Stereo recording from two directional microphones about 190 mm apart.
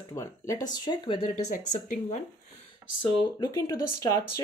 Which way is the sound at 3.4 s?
15° left (ahead or behind).